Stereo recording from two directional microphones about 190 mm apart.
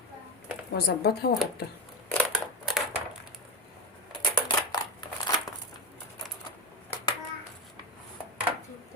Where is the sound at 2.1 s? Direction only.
Centre (ahead or behind).